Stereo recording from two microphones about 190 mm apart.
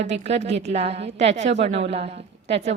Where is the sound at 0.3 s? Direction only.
35° right (ahead or behind).